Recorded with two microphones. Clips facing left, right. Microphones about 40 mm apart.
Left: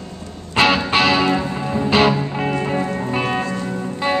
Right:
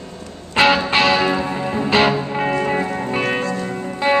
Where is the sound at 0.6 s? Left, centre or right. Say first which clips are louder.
Right 1 dB; centre.